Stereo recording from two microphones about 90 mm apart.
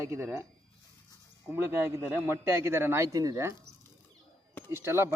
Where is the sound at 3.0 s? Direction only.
40° right (ahead or behind).